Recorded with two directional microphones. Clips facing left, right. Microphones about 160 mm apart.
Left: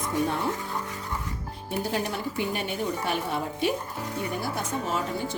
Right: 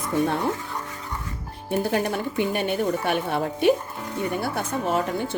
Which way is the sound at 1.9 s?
55° right (ahead or behind).